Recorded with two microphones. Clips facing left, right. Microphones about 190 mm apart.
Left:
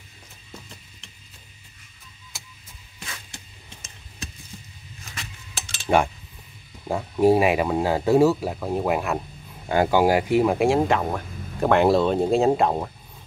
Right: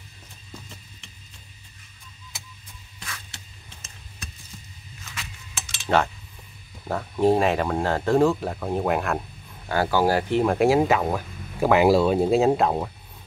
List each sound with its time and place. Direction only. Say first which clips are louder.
5.1 s a sound: even; 35° left (ahead or behind)
6.9 s speech: left 2 dB; 10° left (ahead or behind)
9.7 s speech: left 3 dB; 20° left (ahead or behind); by 12.9 s centre (ahead or behind)